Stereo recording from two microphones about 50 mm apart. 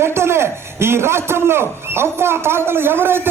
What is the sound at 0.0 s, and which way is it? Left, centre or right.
A man's voice, right.